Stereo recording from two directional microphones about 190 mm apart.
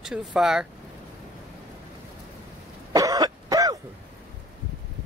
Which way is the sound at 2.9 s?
20° right (ahead or behind).